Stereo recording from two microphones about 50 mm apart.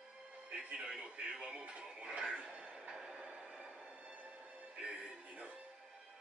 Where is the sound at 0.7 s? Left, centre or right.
Centre.